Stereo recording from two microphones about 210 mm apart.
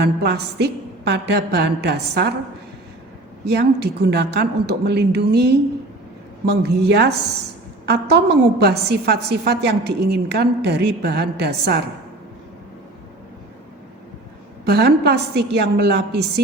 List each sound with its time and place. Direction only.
0.0 s a woman's voice: 50° right (ahead or behind)
3.4 s a woman's voice: 50° right (ahead or behind)
14.6 s a woman's voice: 50° right (ahead or behind)